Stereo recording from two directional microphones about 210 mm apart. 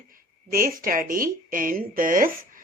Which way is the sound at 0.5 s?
40° right (ahead or behind).